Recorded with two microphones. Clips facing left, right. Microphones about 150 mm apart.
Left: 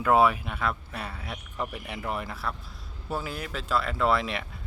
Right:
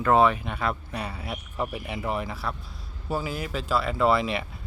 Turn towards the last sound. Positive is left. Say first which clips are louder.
# right 3 dB
turn(degrees=0)  # may be behind; listen again after turning